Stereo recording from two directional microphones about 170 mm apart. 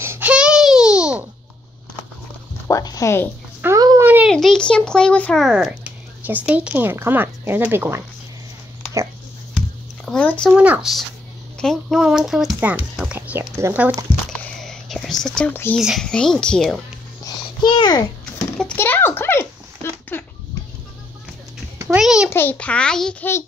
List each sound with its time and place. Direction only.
0.0 s babbling: 10° right (ahead or behind)
2.7 s a sound: 20° left (ahead or behind)
3.6 s a sound: 20° right (ahead or behind)
4.3 s speech: centre (ahead or behind); by 8.0 s 15° right (ahead or behind)
10.0 s speech: 5° left (ahead or behind)
10.5 s a child's voice: 10° right (ahead or behind)
14.3 s whispering: 5° left (ahead or behind)
15.8 s a child's voice: centre (ahead or behind)
17.6 s a child's voice: 30° left (ahead or behind)
18.6 s a child's voice: 10° left (ahead or behind)
21.8 s a child's voice: 5° right (ahead or behind)
22.3 s a child's voice: 10° left (ahead or behind)